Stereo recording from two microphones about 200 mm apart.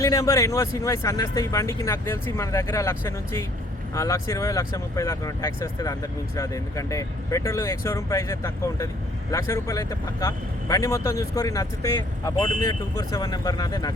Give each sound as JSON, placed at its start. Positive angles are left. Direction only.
{"t": 0.0, "sound": "speech", "side_deg": 15}